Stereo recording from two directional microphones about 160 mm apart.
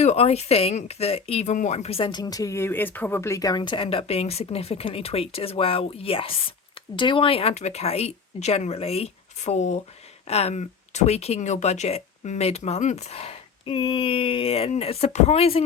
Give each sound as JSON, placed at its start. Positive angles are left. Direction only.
{"t": 0.0, "sound": "speech", "side_deg": 45}